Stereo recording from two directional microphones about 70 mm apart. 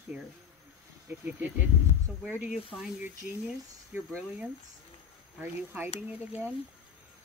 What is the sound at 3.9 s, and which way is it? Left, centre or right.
Speech, right.